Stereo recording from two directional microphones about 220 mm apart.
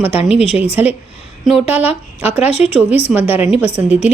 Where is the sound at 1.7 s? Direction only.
5° right (ahead or behind).